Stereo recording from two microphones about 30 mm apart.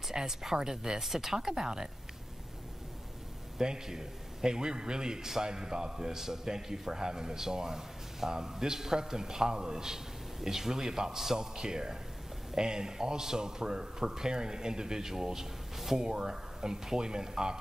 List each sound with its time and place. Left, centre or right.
0.1 s a man's voice: centre
3.6 s a man's voice: right